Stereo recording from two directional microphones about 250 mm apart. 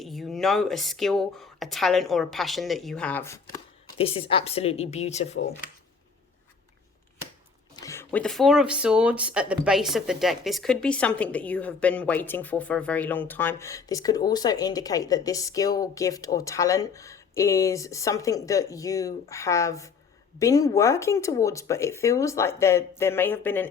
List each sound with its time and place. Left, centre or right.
0.0 s speech: centre
3.9 s speech: left
7.8 s speech: centre